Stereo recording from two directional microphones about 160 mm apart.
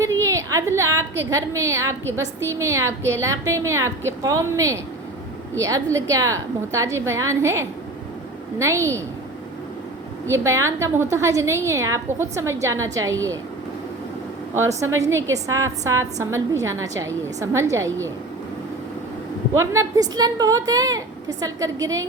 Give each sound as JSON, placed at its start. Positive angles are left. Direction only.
{"t": 0.0, "sound": "a woman's voice", "side_deg": -20}
{"t": 10.3, "sound": "a woman's voice", "side_deg": -20}
{"t": 14.8, "sound": "a woman's voice", "side_deg": -20}
{"t": 19.5, "sound": "a woman's voice", "side_deg": -20}